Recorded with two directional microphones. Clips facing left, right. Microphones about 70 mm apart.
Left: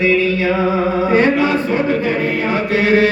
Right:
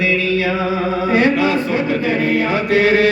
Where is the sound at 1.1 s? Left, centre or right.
Left.